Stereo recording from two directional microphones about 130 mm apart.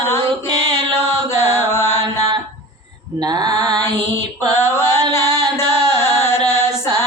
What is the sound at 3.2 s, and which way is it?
Mantra, 30° right (ahead or behind).